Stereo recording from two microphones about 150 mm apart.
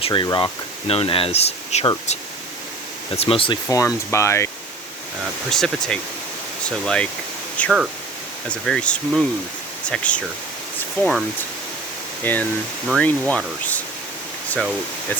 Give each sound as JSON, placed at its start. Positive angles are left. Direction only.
{"t": 0.0, "sound": "speech", "side_deg": 30}
{"t": 3.2, "sound": "speech", "side_deg": 40}
{"t": 3.7, "sound": "speech", "side_deg": 20}
{"t": 5.5, "sound": "speech", "side_deg": 5}
{"t": 12.2, "sound": "speech", "side_deg": 10}